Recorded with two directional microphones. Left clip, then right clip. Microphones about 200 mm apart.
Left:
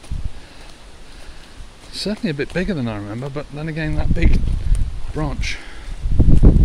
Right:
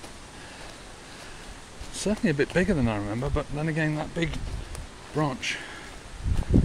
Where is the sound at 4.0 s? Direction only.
30° left (ahead or behind).